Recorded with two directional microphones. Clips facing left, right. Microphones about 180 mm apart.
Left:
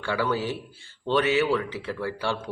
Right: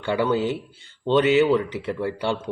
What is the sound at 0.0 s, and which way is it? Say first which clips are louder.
Speech: right 5 dB; 20° right (ahead or behind).